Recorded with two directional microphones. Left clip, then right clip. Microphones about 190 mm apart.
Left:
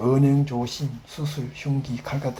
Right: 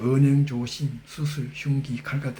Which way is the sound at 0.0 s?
25° right (ahead or behind).